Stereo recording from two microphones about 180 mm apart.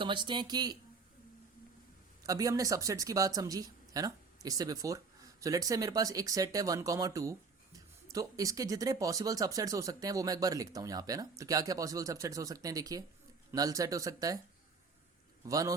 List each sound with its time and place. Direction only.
0.0 s speech: 25° right (ahead or behind)
2.2 s speech: 20° right (ahead or behind)
15.4 s speech: 20° right (ahead or behind)